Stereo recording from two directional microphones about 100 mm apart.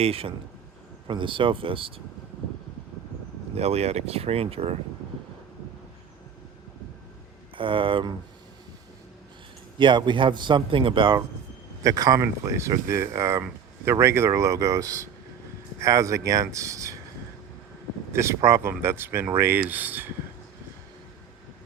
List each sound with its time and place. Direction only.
0.0 s speech: 75° right (ahead or behind)
1.0 s speech: 55° right (ahead or behind)
3.5 s speech: 90° right
7.5 s speech: 60° right (ahead or behind)
9.7 s speech: 50° right (ahead or behind)
11.8 s speech: 35° right (ahead or behind)
18.1 s speech: 25° right (ahead or behind)